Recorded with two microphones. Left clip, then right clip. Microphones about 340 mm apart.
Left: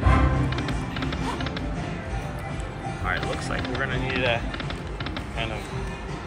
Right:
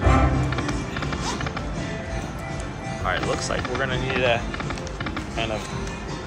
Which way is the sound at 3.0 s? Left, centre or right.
Centre.